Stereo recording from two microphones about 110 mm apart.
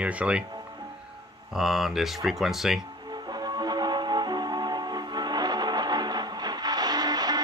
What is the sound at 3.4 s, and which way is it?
Music, 35° right (ahead or behind).